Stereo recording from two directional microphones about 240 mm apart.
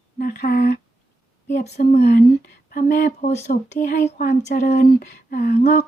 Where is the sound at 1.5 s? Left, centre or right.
Left.